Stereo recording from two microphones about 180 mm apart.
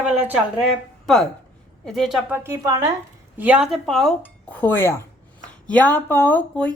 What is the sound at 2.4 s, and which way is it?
Speech, 20° right (ahead or behind).